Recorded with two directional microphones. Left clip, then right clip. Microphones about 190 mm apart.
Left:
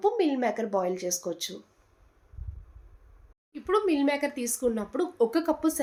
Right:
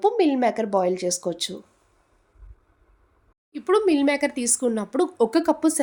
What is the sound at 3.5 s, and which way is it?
Speech, 60° right (ahead or behind).